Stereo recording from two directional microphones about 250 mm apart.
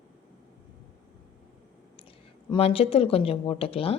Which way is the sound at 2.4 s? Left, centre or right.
Left.